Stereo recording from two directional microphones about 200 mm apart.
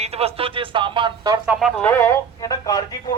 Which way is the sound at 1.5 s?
Centre (ahead or behind).